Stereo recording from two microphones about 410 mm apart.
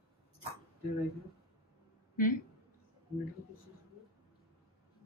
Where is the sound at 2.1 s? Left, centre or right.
Centre.